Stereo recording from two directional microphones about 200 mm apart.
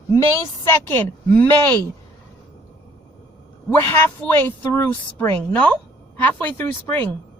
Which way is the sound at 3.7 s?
10° left (ahead or behind).